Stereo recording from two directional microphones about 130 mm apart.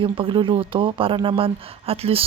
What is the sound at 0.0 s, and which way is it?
Speech, 40° right (ahead or behind).